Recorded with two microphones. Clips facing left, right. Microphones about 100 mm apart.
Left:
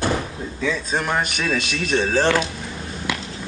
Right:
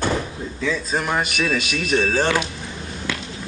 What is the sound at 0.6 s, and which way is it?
Speech, centre (ahead or behind).